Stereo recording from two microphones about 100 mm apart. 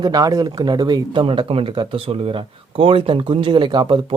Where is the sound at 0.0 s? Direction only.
40° right (ahead or behind).